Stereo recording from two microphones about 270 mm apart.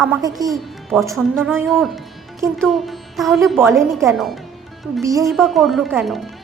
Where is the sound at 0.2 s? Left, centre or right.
Centre.